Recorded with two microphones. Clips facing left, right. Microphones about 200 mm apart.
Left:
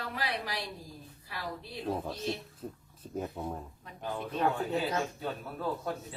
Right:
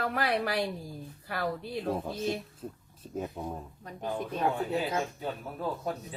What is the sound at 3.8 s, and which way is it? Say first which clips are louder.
Speech: right 5 dB; 45° right (ahead or behind).